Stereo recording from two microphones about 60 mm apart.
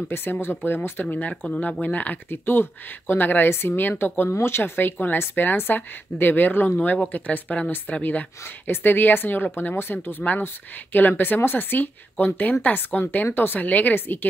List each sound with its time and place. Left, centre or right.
0.1 s speech: left